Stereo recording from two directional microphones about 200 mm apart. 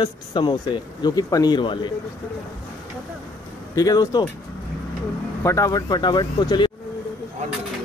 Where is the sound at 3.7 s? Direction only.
15° left (ahead or behind).